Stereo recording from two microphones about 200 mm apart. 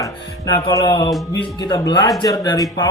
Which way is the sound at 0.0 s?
20° left (ahead or behind).